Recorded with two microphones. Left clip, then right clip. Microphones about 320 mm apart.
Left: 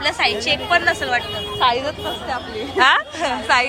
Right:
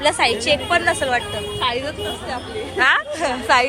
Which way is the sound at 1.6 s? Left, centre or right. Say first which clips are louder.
Left 5 dB; left.